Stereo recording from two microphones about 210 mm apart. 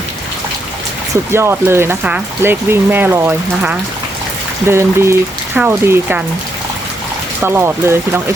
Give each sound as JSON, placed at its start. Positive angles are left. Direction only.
{"t": 1.1, "sound": "speech", "side_deg": -10}
{"t": 7.4, "sound": "speech", "side_deg": -10}